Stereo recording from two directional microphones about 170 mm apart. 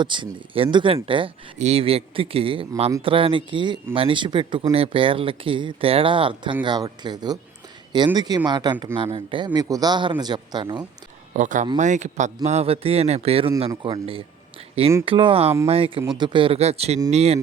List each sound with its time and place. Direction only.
0.0 s speech: 30° right (ahead or behind)
11.3 s speech: 45° right (ahead or behind)